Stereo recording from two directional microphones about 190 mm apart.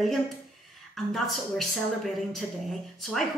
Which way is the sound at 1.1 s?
Centre (ahead or behind).